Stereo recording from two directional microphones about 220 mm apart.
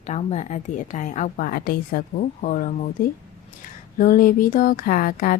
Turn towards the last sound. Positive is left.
turn(degrees=40)  # may be behind; listen again after turning